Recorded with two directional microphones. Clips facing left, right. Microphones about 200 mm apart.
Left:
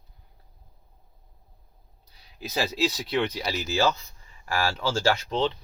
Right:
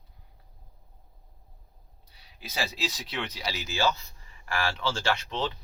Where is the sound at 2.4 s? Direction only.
40° left (ahead or behind).